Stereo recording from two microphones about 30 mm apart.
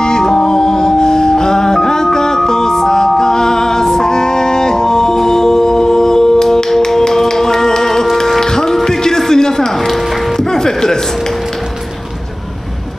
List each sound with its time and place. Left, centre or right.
0.0 s music: left
8.4 s music: centre